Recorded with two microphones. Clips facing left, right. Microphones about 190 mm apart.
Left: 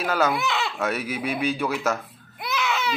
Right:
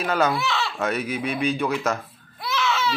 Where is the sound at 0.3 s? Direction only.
15° left (ahead or behind).